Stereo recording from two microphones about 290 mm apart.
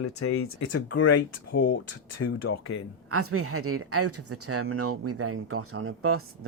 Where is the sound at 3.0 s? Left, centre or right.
Right.